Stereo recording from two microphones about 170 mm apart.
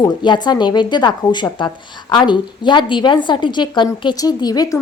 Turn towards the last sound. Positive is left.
turn(degrees=20)  # may be behind; listen again after turning